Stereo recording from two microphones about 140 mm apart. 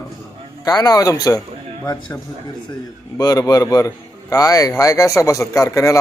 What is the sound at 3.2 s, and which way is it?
A man's voice, 25° left (ahead or behind).